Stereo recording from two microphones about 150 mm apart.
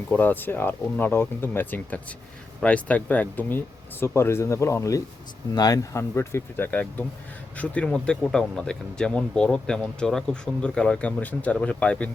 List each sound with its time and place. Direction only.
0.1 s speech: 10° left (ahead or behind)